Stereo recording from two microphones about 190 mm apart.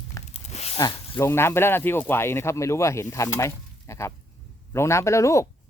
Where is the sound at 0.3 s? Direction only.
35° left (ahead or behind).